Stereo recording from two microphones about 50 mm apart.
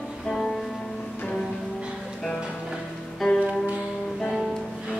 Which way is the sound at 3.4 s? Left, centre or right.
Right.